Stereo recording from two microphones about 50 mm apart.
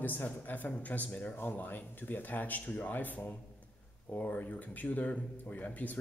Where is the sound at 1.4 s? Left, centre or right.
Left.